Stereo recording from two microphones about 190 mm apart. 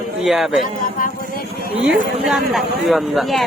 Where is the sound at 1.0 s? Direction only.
45° left (ahead or behind).